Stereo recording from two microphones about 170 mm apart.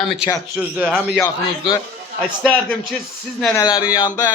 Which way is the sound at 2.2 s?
5° left (ahead or behind).